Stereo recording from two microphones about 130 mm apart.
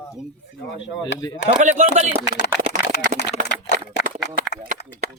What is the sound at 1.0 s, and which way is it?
Speech, 30° left (ahead or behind).